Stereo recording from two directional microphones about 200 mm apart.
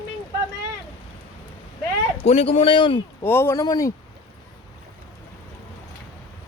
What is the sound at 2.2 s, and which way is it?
Speech, 30° left (ahead or behind).